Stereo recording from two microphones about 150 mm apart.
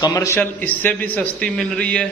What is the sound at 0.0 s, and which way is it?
A man's voice, 20° left (ahead or behind).